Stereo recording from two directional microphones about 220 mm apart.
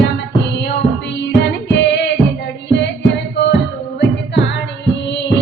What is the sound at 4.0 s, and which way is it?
Music, 50° left (ahead or behind).